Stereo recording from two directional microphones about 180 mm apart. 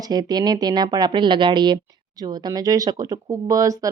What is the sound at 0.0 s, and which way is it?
Speech, 20° right (ahead or behind).